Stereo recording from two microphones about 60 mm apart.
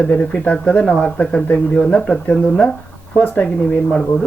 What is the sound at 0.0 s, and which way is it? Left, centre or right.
Speech, left.